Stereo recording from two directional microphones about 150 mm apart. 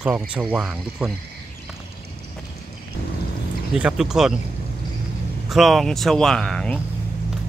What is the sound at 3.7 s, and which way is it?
Speech, 5° right (ahead or behind).